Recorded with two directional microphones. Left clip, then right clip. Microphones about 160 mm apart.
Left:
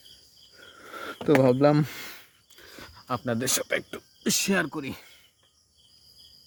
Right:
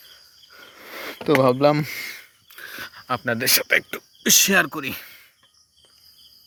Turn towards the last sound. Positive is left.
turn(degrees=0)  # may be behind; listen again after turning